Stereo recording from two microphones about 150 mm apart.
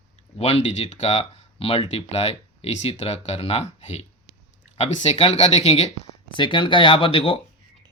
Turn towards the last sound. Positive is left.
turn(degrees=40)  # may be behind; listen again after turning